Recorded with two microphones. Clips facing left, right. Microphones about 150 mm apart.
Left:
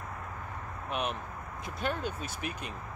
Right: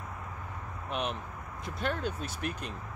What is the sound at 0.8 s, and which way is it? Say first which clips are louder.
Speech: even; 5° left (ahead or behind).